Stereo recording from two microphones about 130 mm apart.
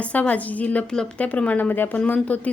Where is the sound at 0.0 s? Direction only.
10° left (ahead or behind).